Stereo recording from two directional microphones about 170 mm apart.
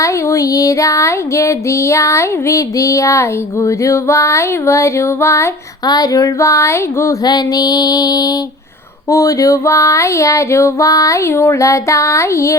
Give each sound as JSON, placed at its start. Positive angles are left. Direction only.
{"t": 0.0, "sound": "female singing", "side_deg": 20}